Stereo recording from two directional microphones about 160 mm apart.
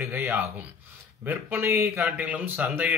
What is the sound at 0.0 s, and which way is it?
Speech, 15° right (ahead or behind).